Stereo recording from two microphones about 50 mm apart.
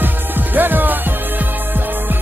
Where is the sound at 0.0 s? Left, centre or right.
Right.